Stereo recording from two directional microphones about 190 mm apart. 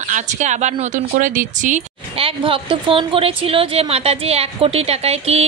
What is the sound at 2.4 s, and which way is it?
A woman's voice, 25° right (ahead or behind).